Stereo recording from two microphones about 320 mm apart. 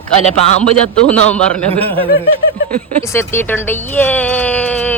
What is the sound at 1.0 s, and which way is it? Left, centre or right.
Speech, centre.